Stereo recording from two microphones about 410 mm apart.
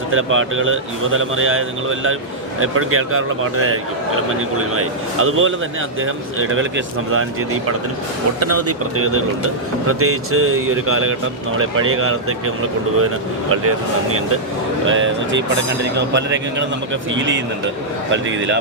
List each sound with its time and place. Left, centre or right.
0.1 s speech: right
8.4 s speech: right
13.5 s speech: right